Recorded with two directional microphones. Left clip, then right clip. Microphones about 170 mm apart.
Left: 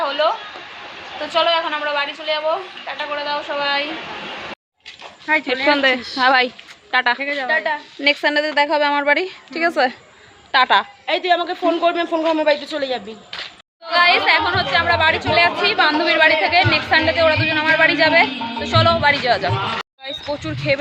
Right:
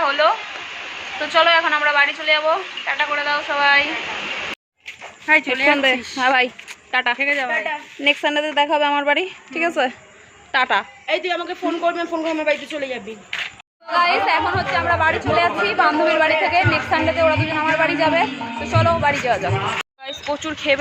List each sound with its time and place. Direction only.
0.0 s a sound: 5° right (ahead or behind)
1.3 s a woman's voice: 5° right (ahead or behind)
5.2 s a woman's voice: 5° left (ahead or behind)
11.0 s a man's voice: 45° left (ahead or behind)
13.9 s a woman's voice: 10° right (ahead or behind)